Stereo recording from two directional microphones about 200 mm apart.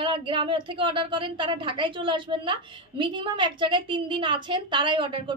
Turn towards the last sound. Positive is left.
turn(degrees=-25)  # may be behind; listen again after turning